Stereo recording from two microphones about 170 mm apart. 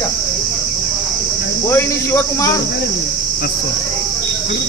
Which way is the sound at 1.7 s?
15° left (ahead or behind).